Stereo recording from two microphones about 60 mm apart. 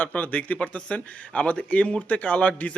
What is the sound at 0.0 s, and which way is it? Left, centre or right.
Speech, left.